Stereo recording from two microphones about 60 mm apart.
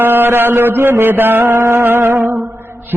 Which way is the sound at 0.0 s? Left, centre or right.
Right.